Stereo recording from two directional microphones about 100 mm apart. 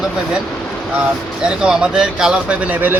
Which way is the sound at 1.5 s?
10° right (ahead or behind).